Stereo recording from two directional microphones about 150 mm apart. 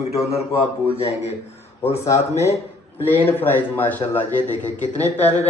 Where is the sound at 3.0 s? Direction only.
10° left (ahead or behind).